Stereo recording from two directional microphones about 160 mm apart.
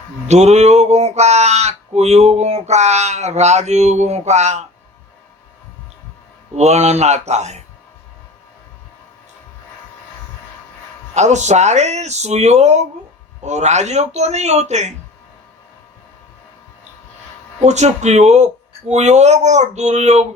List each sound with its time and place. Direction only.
0.3 s speech: 45° right (ahead or behind)
6.6 s speech: 45° right (ahead or behind)
11.1 s speech: 45° right (ahead or behind)
17.6 s speech: 45° right (ahead or behind)